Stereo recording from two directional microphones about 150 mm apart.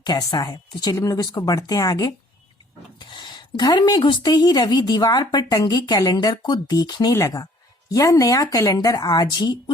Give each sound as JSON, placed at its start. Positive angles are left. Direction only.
{"t": 0.0, "sound": "a woman's voice", "side_deg": 25}
{"t": 3.0, "sound": "a sound", "side_deg": 30}
{"t": 3.6, "sound": "a woman's voice", "side_deg": 25}